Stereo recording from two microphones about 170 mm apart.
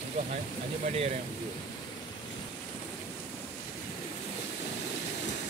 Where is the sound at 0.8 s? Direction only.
40° right (ahead or behind).